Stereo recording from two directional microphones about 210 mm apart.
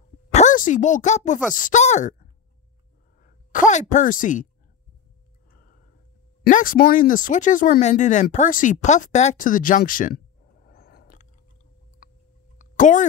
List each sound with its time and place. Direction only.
0.3 s a woman's voice: 35° left (ahead or behind)
6.4 s speech: 40° left (ahead or behind)
12.5 s a sound: 35° left (ahead or behind)